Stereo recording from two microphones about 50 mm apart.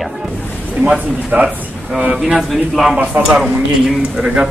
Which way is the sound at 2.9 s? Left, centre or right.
Right.